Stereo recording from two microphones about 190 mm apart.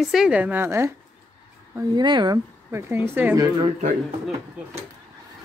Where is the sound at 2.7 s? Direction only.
10° right (ahead or behind).